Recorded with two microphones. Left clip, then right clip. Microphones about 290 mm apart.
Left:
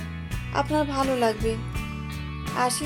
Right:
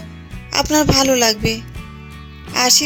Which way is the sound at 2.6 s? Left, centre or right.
Right.